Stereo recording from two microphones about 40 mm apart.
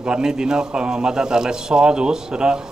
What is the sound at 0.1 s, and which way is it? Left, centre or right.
A man's voice, centre.